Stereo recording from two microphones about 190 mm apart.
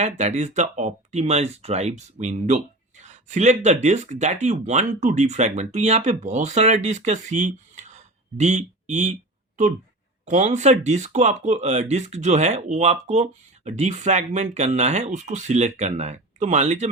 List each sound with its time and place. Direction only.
0.0 s speech: 35° right (ahead or behind)
10.2 s speech: 40° right (ahead or behind)